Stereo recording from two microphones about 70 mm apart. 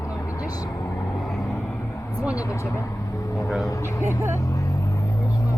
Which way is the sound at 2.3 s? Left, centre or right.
Left.